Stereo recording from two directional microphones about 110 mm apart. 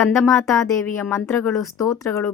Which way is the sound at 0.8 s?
20° left (ahead or behind).